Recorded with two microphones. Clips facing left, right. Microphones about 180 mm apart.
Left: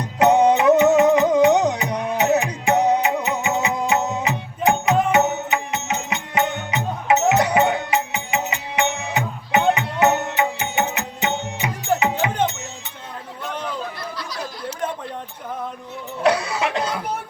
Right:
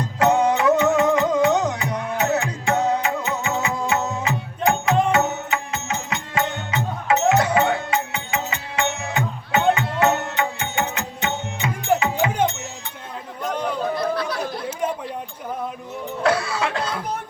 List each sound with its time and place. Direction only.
0.0 s music: 20° left (ahead or behind)
11.9 s music: 10° right (ahead or behind)
13.9 s chatter: 55° right (ahead or behind)
16.2 s cough: 20° left (ahead or behind)